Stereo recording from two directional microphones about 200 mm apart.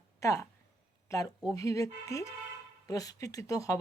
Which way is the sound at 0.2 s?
15° left (ahead or behind).